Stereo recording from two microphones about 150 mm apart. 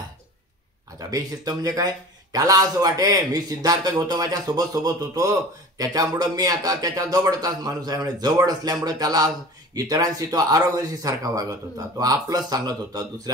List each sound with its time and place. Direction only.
0.9 s a man's voice: 25° right (ahead or behind)